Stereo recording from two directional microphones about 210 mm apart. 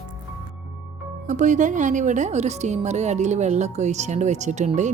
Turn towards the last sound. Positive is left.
turn(degrees=-35)  # may be behind; listen again after turning